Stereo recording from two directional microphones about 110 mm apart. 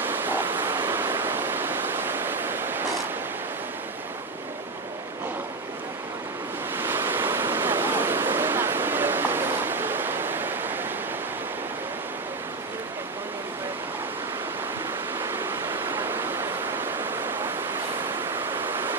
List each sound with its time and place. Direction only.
0.0 s waves: 20° right (ahead or behind)
6.8 s waves: 20° right (ahead or behind)
15.1 s pink noise: 20° right (ahead or behind)